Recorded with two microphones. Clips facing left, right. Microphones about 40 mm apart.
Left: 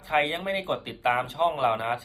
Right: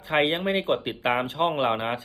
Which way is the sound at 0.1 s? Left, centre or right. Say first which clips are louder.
Right 2 dB; right.